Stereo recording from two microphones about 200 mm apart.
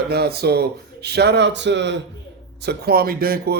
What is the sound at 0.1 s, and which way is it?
Speech, 55° right (ahead or behind).